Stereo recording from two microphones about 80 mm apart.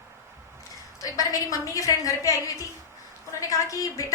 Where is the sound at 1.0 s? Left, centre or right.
Left.